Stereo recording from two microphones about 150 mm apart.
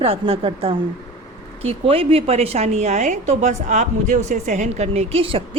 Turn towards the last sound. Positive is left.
turn(degrees=-40)  # may be behind; listen again after turning